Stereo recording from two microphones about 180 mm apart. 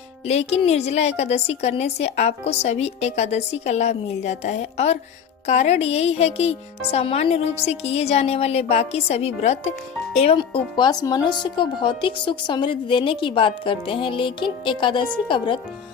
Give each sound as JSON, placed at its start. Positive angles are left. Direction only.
{"t": 0.3, "sound": "a woman's voice", "side_deg": 35}